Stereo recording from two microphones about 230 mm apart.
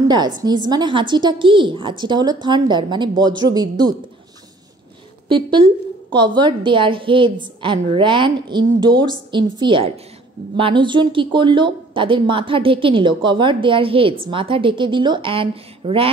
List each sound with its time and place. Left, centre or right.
0.1 s a woman's voice: centre
5.3 s speech: right